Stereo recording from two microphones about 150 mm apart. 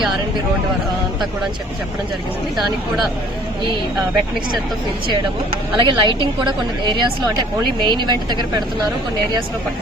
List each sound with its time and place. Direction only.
5.7 s a woman's voice: 30° right (ahead or behind)